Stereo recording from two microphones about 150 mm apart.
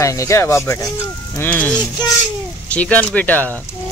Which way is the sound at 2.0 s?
30° left (ahead or behind).